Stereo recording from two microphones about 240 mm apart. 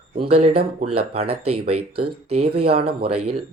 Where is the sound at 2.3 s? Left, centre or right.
Right.